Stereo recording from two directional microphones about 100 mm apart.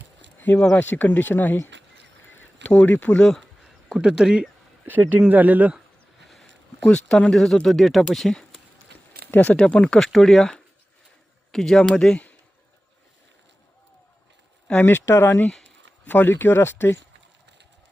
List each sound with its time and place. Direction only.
0.6 s speech: 10° left (ahead or behind)
3.8 s speech: 5° right (ahead or behind)
4.9 s speech: 20° right (ahead or behind)
6.2 s a sound: centre (ahead or behind)
6.7 s speech: 10° left (ahead or behind)
9.3 s speech: 15° left (ahead or behind)
14.7 s speech: 20° left (ahead or behind)